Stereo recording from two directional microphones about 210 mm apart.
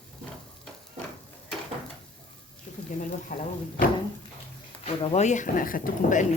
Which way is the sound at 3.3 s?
35° left (ahead or behind).